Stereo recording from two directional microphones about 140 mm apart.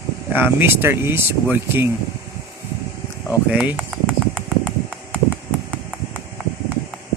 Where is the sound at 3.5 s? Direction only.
10° right (ahead or behind).